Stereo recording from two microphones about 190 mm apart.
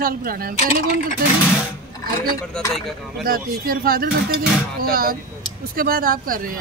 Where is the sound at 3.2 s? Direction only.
50° right (ahead or behind).